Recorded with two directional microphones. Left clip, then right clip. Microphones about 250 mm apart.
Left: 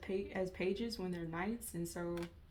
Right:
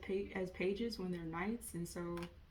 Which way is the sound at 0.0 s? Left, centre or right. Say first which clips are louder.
Left 1 dB; left.